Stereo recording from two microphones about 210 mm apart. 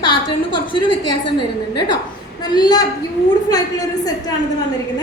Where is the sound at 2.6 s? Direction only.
20° left (ahead or behind).